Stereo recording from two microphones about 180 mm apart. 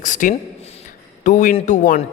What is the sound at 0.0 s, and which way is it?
A man's voice, 45° left (ahead or behind).